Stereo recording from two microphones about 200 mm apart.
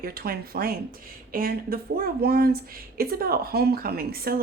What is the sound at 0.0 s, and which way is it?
Speech, 50° right (ahead or behind).